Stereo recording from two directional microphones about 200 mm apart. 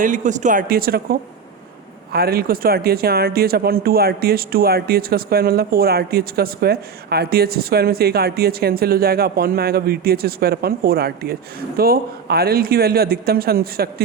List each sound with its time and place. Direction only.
0.0 s speech: 40° right (ahead or behind)